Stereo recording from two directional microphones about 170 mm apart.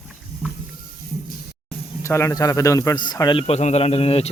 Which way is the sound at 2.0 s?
15° left (ahead or behind).